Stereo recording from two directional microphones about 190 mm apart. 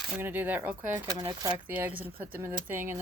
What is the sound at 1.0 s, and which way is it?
Speech, 20° right (ahead or behind).